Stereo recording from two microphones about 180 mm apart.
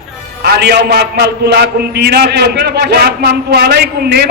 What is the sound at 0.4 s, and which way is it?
A man's voice, 65° right (ahead or behind).